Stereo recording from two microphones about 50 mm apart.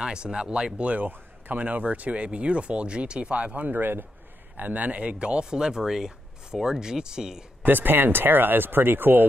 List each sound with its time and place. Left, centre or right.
0.0 s speech: centre
1.0 s speech: right; by 7.4 s centre
7.6 s speech: right